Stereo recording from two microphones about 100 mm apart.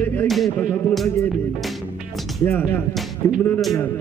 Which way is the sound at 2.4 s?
20° left (ahead or behind).